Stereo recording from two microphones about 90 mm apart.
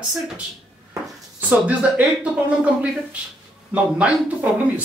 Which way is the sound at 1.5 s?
15° right (ahead or behind).